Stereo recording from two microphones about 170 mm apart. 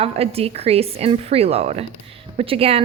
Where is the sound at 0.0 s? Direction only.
35° right (ahead or behind).